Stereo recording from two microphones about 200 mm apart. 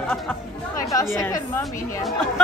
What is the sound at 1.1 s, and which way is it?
Speech, 15° left (ahead or behind).